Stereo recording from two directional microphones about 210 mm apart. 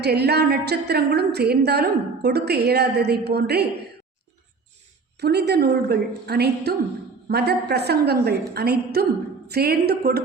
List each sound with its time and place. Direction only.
0.0 s a woman's voice: 50° right (ahead or behind)
5.2 s a woman's voice: 50° right (ahead or behind)